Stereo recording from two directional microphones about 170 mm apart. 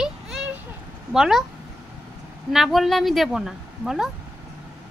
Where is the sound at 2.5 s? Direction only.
Centre (ahead or behind).